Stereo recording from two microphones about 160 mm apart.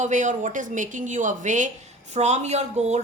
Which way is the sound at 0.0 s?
50° right (ahead or behind).